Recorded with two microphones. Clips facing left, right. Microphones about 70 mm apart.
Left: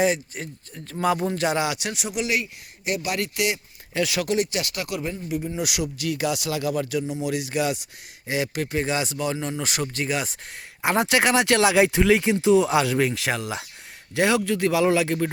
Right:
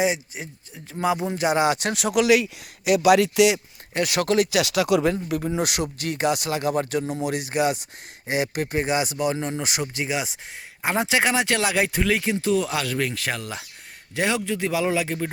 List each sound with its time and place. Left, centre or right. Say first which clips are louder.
0.0 s speech: left 1 dB; centre
1.3 s speech: right 2 dB; centre
1.8 s speech: right 6 dB; right
2.8 s speech: right 10 dB; right
3.9 s speech: even; right
4.2 s speech: right 4 dB; right
4.5 s speech: right 8 dB; right
5.5 s speech: right 2 dB; right; by 15.3 s centre